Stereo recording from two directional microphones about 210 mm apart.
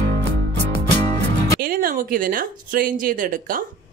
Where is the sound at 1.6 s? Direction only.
45° right (ahead or behind).